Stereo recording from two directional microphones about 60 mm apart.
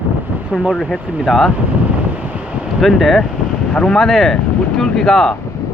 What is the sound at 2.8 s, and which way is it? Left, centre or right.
Speech, centre.